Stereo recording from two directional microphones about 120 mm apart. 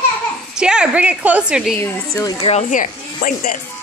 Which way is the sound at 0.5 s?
5° right (ahead or behind).